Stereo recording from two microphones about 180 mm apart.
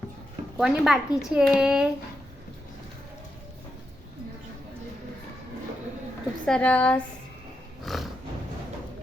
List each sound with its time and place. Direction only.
0.5 s speech: centre (ahead or behind)
6.4 s a woman's voice: 5° left (ahead or behind)
7.9 s a sound: centre (ahead or behind)